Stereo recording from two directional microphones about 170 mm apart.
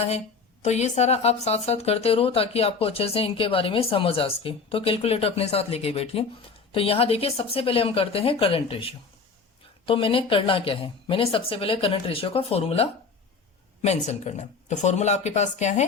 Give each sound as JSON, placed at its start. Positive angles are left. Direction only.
{"t": 0.6, "sound": "speech", "side_deg": 40}